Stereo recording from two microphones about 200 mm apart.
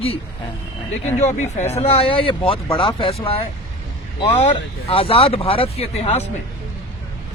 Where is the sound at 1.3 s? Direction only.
35° left (ahead or behind).